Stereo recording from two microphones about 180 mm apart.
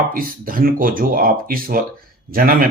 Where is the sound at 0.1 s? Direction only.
50° right (ahead or behind).